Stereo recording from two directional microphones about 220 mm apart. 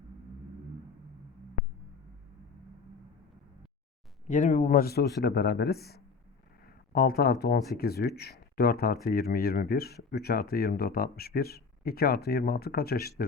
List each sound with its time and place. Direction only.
4.3 s speech: 35° left (ahead or behind)